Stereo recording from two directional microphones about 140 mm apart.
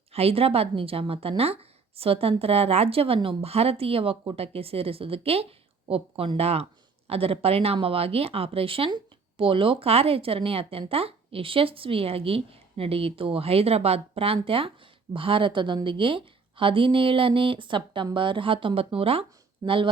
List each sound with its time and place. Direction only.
0.1 s a woman's voice: 45° right (ahead or behind)